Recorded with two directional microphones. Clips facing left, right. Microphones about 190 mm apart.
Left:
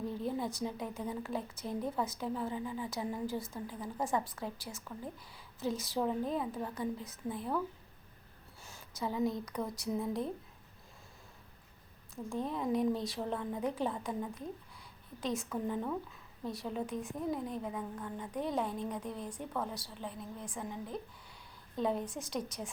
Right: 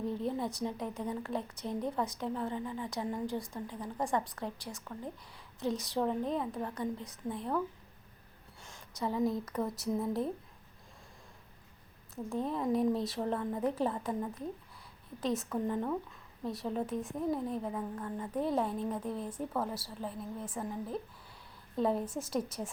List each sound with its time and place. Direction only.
0.0 s speech: centre (ahead or behind)
8.6 s speech: 5° left (ahead or behind)
12.1 s speech: centre (ahead or behind)